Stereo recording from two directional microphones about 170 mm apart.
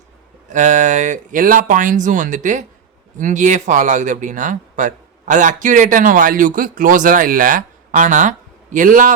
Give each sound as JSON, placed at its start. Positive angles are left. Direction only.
{"t": 0.5, "sound": "speech", "side_deg": -45}